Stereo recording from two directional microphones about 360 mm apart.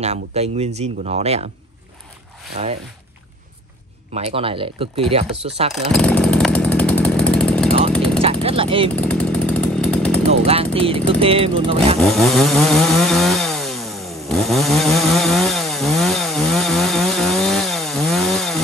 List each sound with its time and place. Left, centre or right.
0.0 s speech: centre
2.5 s speech: centre
4.1 s speech: centre
5.8 s chainsaw: centre
8.2 s a sound: centre
8.9 s chainsaw: centre
10.3 s speech: centre
12.0 s chainsaw: centre